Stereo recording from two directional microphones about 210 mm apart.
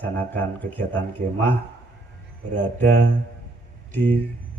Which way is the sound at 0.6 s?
40° right (ahead or behind).